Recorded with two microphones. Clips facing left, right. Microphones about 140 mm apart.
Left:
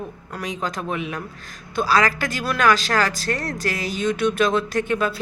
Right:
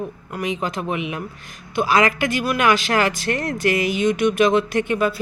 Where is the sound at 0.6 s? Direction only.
15° right (ahead or behind).